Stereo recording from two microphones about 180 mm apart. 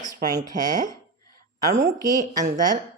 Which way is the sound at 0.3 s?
20° right (ahead or behind).